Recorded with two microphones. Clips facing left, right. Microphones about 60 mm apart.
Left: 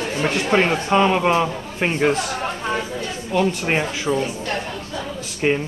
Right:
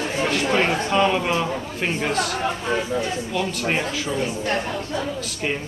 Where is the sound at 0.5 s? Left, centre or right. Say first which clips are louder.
Left 5 dB; left.